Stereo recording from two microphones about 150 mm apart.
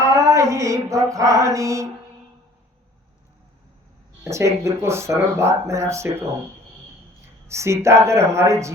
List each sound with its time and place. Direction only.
0.1 s a sound: 20° right (ahead or behind)
4.2 s speech: 20° right (ahead or behind)
7.4 s speech: 20° right (ahead or behind)